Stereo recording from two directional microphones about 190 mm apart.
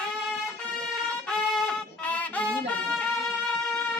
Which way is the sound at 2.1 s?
5° left (ahead or behind).